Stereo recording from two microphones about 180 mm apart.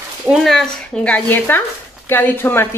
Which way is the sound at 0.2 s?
Centre (ahead or behind).